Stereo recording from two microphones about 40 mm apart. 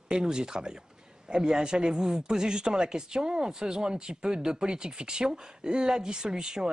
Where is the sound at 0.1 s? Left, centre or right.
Centre.